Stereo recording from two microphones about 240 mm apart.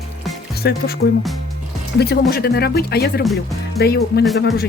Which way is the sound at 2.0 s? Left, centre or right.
Left.